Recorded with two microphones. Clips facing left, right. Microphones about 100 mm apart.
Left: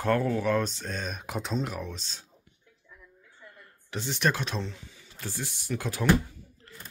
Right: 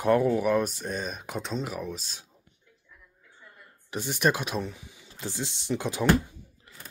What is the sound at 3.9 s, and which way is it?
Speech, 10° right (ahead or behind).